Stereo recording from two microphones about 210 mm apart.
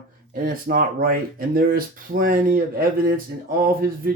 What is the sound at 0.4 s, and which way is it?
Speech, 40° right (ahead or behind).